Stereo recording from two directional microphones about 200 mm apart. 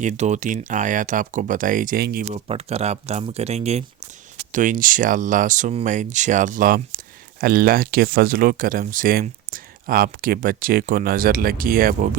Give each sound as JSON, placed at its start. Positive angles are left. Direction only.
{"t": 0.0, "sound": "speech", "side_deg": -35}
{"t": 2.5, "sound": "speech", "side_deg": -30}